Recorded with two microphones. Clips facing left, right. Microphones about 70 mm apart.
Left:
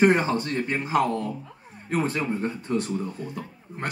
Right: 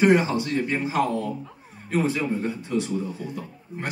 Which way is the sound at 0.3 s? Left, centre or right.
Left.